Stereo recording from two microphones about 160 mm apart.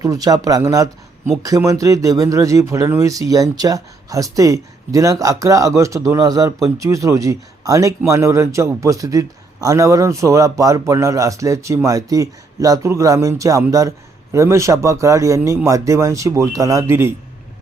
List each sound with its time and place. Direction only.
0.0 s speech: 20° right (ahead or behind)